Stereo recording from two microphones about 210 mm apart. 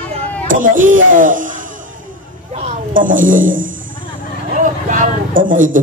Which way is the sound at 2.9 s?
40° right (ahead or behind).